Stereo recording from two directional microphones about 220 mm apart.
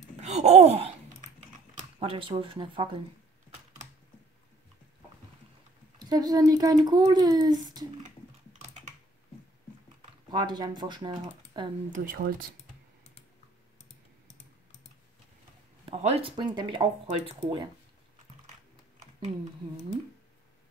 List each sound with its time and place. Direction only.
0.2 s a sound: 30° right (ahead or behind)
2.0 s speech: 25° right (ahead or behind)
5.9 s a child's voice: 20° right (ahead or behind)
10.3 s speech: 20° right (ahead or behind)
11.9 s speech: 40° right (ahead or behind)
15.8 s speech: 30° right (ahead or behind)
18.9 s typing: 20° right (ahead or behind)